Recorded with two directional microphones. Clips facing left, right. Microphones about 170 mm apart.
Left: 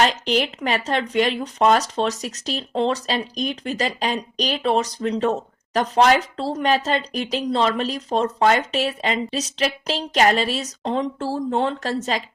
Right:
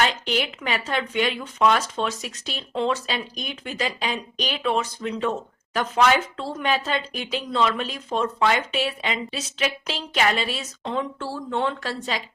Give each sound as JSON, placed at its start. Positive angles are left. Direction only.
{"t": 0.0, "sound": "speech", "side_deg": 40}